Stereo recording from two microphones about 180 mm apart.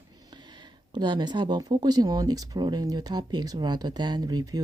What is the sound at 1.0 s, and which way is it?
Speech, 25° right (ahead or behind).